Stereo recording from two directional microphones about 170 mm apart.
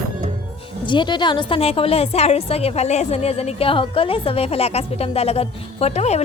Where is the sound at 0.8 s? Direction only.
30° left (ahead or behind).